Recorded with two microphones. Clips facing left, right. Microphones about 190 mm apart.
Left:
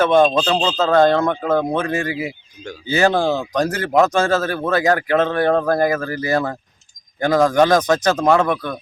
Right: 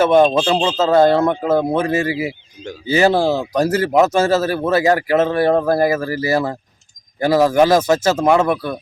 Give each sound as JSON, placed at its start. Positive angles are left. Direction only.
{"t": 0.0, "sound": "speech", "side_deg": -5}